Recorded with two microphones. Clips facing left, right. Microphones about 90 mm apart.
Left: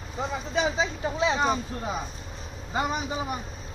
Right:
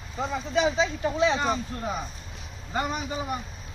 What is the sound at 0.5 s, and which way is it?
Speech, 25° left (ahead or behind).